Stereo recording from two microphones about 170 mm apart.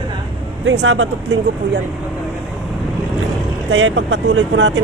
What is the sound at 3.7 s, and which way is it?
Speech, 90° right.